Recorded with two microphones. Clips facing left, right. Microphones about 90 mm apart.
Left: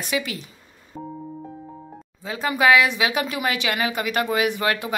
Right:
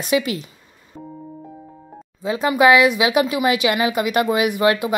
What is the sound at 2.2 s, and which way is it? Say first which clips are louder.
A woman's voice: right 6 dB; 20° right (ahead or behind).